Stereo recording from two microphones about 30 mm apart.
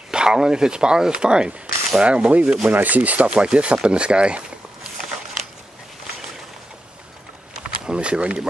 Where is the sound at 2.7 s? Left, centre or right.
Right.